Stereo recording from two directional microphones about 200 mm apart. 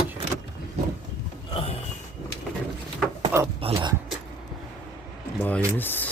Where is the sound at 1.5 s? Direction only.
30° left (ahead or behind).